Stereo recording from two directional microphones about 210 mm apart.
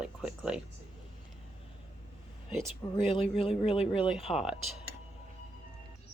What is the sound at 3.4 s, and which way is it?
Speech, 30° left (ahead or behind).